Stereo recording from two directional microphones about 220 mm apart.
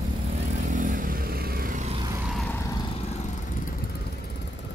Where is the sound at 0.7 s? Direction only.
35° right (ahead or behind).